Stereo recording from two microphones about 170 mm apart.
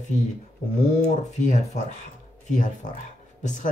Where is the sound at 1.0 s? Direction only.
45° left (ahead or behind).